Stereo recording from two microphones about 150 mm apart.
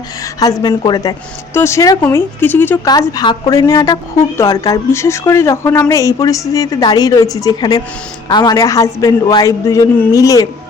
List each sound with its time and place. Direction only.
0.6 s a man's voice: 30° left (ahead or behind)
1.5 s speech: 20° left (ahead or behind)
2.8 s a man's voice: 25° left (ahead or behind)